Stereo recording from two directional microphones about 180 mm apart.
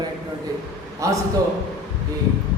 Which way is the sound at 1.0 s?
20° right (ahead or behind).